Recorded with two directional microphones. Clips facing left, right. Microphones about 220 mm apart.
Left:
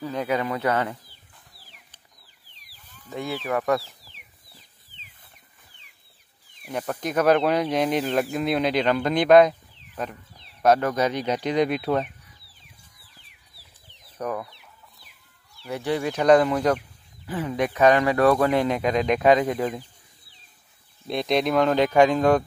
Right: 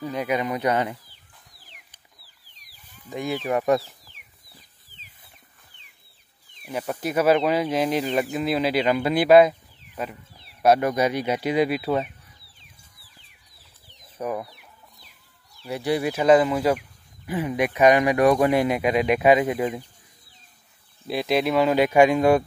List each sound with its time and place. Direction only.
0.0 s speech: 10° right (ahead or behind)
3.0 s speech: 15° right (ahead or behind)
6.7 s speech: 5° right (ahead or behind)
13.8 s chicken: 10° right (ahead or behind)
15.6 s speech: 15° right (ahead or behind)
21.1 s speech: 5° right (ahead or behind)